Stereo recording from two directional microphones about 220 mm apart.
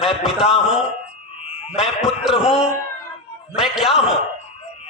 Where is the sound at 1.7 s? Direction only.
Centre (ahead or behind).